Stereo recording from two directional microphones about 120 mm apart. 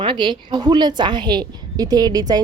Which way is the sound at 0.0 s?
40° right (ahead or behind).